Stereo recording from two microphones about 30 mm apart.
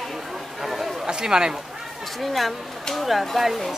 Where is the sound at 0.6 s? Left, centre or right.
Centre.